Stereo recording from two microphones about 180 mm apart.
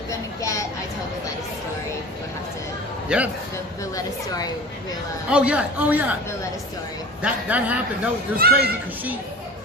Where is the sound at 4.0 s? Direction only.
20° left (ahead or behind).